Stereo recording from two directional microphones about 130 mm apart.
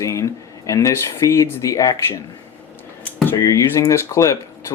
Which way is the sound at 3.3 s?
25° left (ahead or behind).